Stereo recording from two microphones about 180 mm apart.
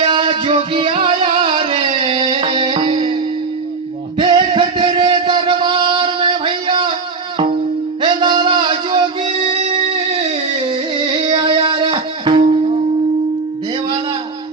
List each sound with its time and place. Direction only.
0.0 s music: 30° right (ahead or behind)
4.2 s music: 25° right (ahead or behind)
8.0 s music: 25° right (ahead or behind)